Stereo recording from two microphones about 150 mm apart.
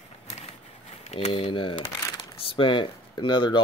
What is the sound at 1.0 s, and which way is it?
Speech, 40° left (ahead or behind).